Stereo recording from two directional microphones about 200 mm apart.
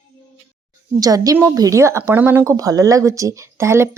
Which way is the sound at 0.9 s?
15° right (ahead or behind).